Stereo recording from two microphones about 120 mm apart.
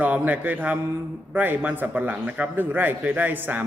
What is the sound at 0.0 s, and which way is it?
A man's voice, 15° right (ahead or behind).